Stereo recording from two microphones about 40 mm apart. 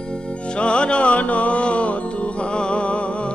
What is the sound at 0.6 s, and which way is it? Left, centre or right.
Music, left.